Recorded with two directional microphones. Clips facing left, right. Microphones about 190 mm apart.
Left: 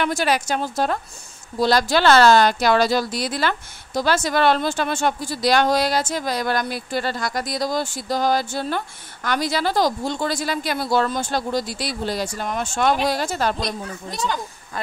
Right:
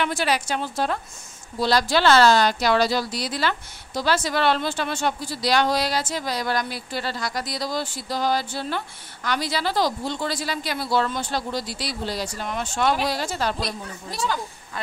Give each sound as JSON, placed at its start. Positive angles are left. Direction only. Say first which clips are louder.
{"t": 0.0, "sound": "a woman's voice", "louder": "left 3 dB", "side_deg": 45}